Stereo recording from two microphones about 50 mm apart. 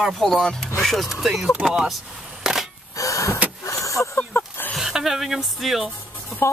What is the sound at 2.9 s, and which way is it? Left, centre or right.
Vehicle, left.